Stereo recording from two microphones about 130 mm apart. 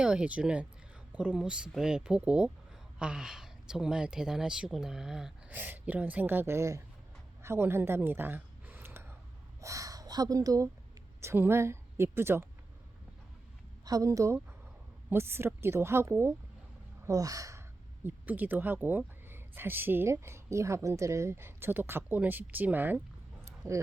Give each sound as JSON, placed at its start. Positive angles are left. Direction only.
{"t": 0.0, "sound": "speech", "side_deg": -10}
{"t": 7.4, "sound": "a sound", "side_deg": -20}
{"t": 9.6, "sound": "speech", "side_deg": -25}
{"t": 13.8, "sound": "speech", "side_deg": -25}
{"t": 18.0, "sound": "speech", "side_deg": -15}